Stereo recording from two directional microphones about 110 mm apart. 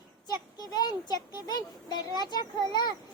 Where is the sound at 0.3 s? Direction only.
35° left (ahead or behind).